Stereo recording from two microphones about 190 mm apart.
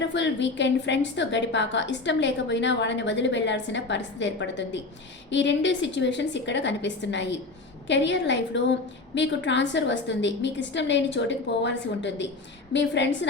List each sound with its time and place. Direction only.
0.1 s a woman's voice: 70° left (ahead or behind)